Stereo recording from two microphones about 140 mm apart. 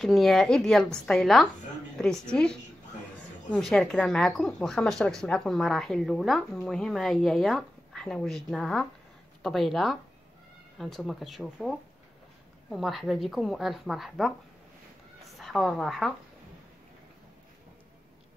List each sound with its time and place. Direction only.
0.0 s a woman's voice: centre (ahead or behind)
3.4 s a woman's voice: 5° left (ahead or behind)